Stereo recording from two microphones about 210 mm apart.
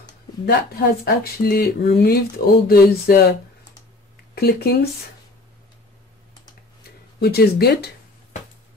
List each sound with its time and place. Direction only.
0.5 s speech: 45° left (ahead or behind)
4.4 s speech: 50° left (ahead or behind)
7.2 s speech: 50° left (ahead or behind)